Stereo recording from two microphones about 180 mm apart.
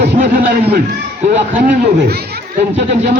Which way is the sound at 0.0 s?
50° right (ahead or behind).